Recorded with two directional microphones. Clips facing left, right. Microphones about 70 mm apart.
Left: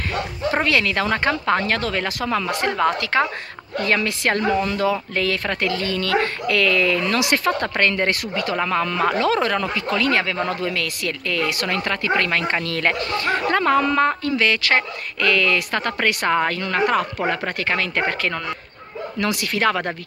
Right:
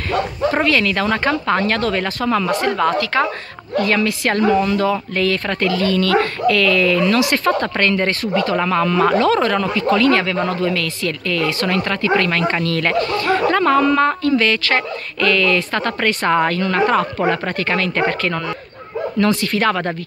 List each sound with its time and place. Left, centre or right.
0.5 s speech: centre
2.6 s speech: centre